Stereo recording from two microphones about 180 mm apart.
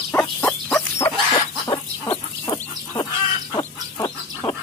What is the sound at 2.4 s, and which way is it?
Dog, 20° left (ahead or behind).